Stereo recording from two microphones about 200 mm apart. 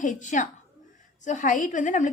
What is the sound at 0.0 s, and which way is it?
Speech, 40° left (ahead or behind).